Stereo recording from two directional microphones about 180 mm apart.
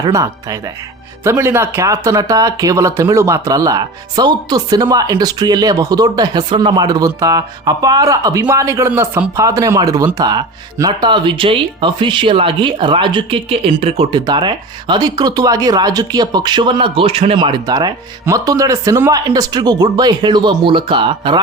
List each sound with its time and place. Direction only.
0.0 s speech: 20° right (ahead or behind)